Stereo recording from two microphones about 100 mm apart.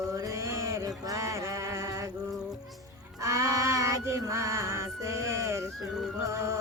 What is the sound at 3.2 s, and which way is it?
Music, 30° right (ahead or behind).